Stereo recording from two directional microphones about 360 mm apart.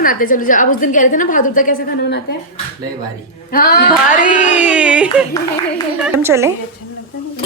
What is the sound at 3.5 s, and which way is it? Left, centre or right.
Speech, left.